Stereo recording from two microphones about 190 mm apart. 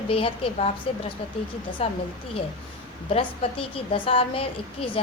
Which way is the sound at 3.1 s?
30° left (ahead or behind).